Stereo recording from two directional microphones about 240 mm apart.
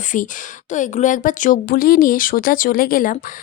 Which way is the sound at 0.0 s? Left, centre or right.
Left.